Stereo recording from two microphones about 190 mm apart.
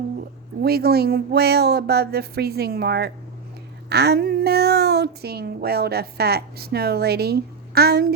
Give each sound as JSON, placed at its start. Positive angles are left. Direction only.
{"t": 0.6, "sound": "a woman's voice", "side_deg": -55}